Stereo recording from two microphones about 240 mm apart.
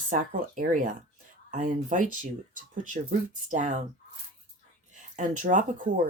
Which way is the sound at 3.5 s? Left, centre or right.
Right.